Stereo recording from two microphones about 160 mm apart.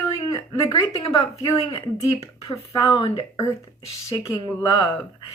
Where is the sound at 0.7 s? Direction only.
35° left (ahead or behind).